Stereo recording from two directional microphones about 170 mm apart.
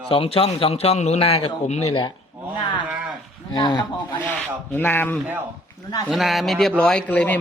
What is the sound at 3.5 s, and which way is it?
Speech, 25° left (ahead or behind).